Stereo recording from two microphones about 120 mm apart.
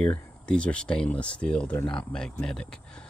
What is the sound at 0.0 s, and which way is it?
Speech, 10° left (ahead or behind).